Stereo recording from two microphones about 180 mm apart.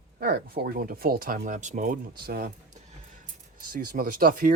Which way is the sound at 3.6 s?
55° right (ahead or behind).